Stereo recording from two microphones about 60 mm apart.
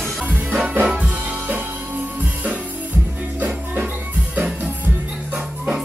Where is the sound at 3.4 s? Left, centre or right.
Right.